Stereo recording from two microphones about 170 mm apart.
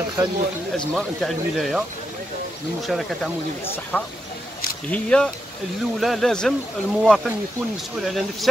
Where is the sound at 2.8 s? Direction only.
Centre (ahead or behind).